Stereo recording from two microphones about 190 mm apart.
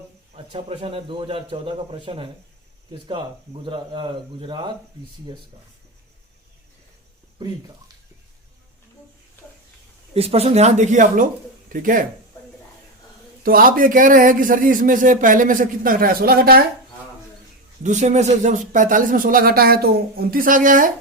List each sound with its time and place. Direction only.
0.3 s a man's voice: 30° right (ahead or behind)
10.2 s a man's voice: 30° right (ahead or behind)
13.4 s a man's voice: 50° right (ahead or behind)
17.8 s a man's voice: 40° right (ahead or behind)